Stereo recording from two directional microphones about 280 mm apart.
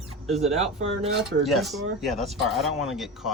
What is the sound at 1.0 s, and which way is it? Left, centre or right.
Speech, centre.